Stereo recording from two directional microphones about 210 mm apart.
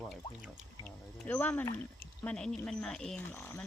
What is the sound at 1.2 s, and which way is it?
Speech, 10° left (ahead or behind).